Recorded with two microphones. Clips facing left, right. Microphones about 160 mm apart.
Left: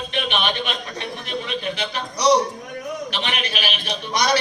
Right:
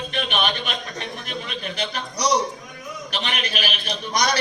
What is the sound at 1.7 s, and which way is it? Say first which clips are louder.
A man's voice: left 1 dB; 40° right (ahead or behind).